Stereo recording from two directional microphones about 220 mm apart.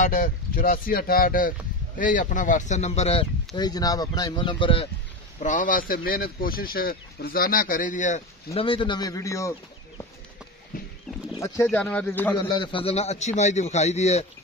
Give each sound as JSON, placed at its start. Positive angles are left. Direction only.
{"t": 0.0, "sound": "speech", "side_deg": 35}
{"t": 5.4, "sound": "speech", "side_deg": 35}
{"t": 8.5, "sound": "speech", "side_deg": 25}
{"t": 10.7, "sound": "a sound", "side_deg": 40}
{"t": 11.3, "sound": "speech", "side_deg": 15}
{"t": 12.4, "sound": "speech", "side_deg": 20}